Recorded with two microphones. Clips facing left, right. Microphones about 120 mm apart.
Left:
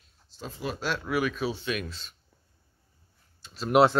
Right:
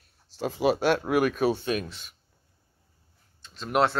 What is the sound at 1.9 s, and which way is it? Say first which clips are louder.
Speech: left 1 dB; 15° right (ahead or behind).